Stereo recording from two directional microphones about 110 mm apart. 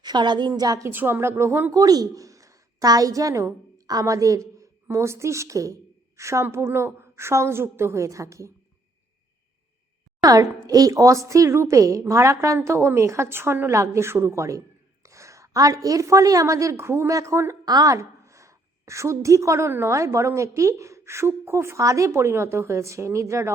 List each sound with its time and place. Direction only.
0.0 s a woman's voice: 40° right (ahead or behind)
0.9 s a woman's voice: 20° right (ahead or behind)
10.2 s a woman's voice: 35° right (ahead or behind)